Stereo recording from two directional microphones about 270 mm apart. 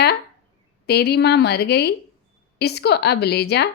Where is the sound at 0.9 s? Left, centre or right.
Left.